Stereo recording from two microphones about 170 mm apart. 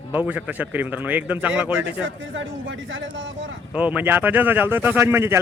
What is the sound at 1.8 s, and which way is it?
Speech, 90° right.